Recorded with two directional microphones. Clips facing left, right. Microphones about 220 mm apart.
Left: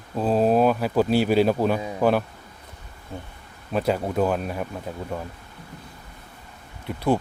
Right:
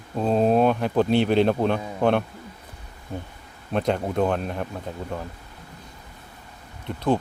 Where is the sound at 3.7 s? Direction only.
5° left (ahead or behind).